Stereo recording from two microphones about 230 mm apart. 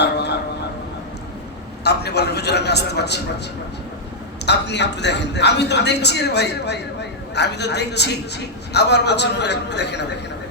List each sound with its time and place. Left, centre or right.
0.0 s a sound: left
1.8 s speech: left
4.4 s speech: left